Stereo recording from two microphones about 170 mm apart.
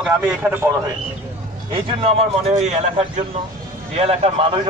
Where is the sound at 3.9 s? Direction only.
40° right (ahead or behind).